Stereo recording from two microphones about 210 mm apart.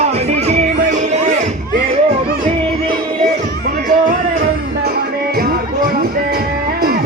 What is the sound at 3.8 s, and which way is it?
Music, 40° right (ahead or behind).